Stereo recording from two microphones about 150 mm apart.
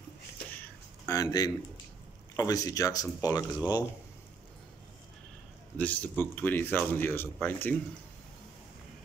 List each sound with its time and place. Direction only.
1.0 s speech: 25° left (ahead or behind)
5.8 s a man's voice: 10° left (ahead or behind)